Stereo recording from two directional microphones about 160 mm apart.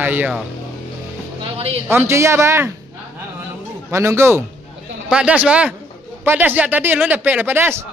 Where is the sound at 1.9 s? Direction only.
15° right (ahead or behind).